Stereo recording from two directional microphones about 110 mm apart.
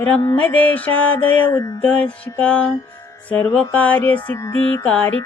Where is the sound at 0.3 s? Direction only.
15° left (ahead or behind).